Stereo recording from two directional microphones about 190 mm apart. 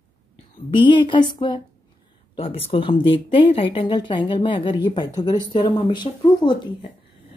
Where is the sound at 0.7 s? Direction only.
25° left (ahead or behind).